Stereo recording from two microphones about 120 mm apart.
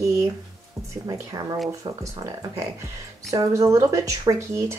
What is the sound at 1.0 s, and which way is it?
Speech, 30° right (ahead or behind).